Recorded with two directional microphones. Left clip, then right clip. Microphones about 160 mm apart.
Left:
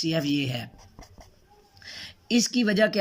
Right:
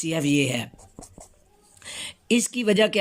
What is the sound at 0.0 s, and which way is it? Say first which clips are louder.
Writing: right 3 dB; 25° right (ahead or behind).